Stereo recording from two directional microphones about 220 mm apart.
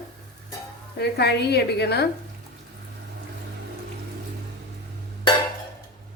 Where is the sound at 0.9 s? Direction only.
50° left (ahead or behind).